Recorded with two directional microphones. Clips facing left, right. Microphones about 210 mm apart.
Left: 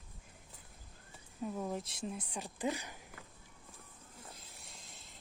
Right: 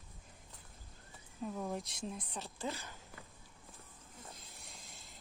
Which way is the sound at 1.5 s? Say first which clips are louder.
Left 1 dB; 5° left (ahead or behind).